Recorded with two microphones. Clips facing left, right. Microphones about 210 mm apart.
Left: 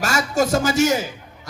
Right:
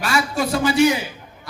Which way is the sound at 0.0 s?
45° left (ahead or behind).